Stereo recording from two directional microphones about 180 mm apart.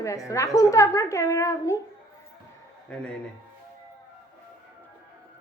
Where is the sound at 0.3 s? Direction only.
20° left (ahead or behind).